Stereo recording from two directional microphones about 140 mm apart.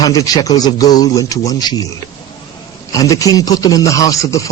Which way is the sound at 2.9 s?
25° left (ahead or behind).